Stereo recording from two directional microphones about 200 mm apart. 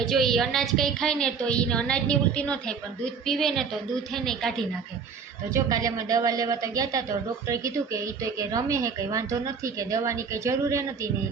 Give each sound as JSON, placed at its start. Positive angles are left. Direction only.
{"t": 0.0, "sound": "a woman's voice", "side_deg": 0}
{"t": 5.5, "sound": "speech", "side_deg": -15}